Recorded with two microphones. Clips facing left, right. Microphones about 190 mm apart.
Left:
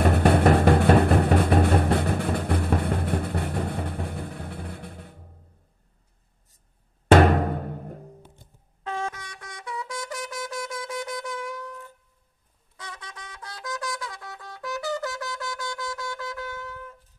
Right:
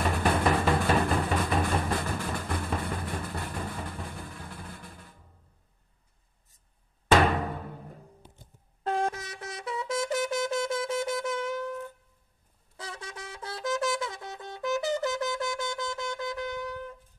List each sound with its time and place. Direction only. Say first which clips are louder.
0.0 s vehicle: left 7 dB; 65° left (ahead or behind)
7.1 s timpani: left 6 dB; 55° left (ahead or behind)
8.8 s shofar: right 3 dB; 35° right (ahead or behind)
12.7 s wind instrument: right 2 dB; 30° right (ahead or behind)